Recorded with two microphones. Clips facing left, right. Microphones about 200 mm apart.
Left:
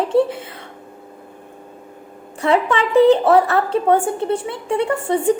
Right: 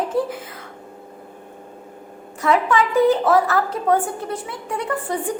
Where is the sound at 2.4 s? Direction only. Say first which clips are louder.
Left 1 dB; 25° left (ahead or behind).